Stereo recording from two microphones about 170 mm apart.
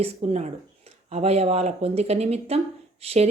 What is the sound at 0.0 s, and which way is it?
Speech, 40° right (ahead or behind).